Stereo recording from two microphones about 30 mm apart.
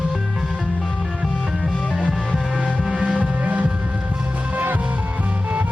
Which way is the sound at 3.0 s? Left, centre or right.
Right.